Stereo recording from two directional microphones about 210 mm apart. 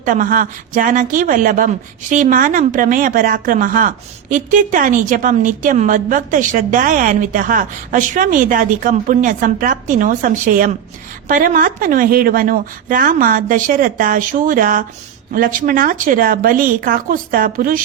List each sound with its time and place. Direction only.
0.0 s a woman's voice: 40° right (ahead or behind)